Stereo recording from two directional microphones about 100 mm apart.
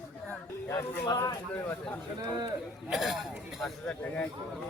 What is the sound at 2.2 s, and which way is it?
Speech, 45° right (ahead or behind).